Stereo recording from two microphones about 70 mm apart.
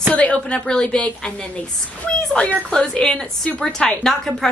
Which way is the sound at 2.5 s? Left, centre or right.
Centre.